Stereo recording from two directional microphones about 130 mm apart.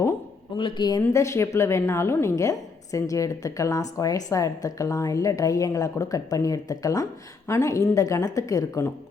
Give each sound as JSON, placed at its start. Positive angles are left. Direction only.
{"t": 0.5, "sound": "speech", "side_deg": 35}